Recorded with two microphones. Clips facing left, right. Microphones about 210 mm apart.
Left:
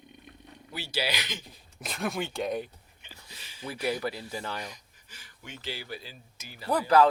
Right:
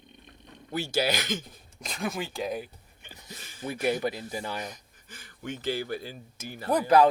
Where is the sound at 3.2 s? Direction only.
50° right (ahead or behind).